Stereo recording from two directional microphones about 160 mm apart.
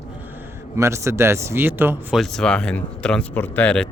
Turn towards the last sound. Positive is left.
turn(degrees=5)  # may be behind; listen again after turning